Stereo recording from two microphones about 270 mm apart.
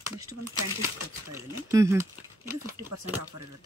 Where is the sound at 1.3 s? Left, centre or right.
Centre.